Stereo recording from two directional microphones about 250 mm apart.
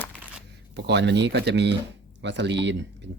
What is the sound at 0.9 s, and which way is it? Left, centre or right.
Speech, right.